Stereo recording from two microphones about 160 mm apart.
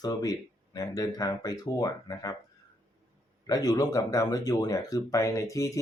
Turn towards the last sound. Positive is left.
turn(degrees=20)  # may be behind; listen again after turning